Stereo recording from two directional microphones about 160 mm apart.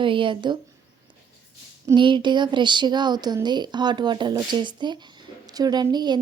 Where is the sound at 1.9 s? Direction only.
30° right (ahead or behind).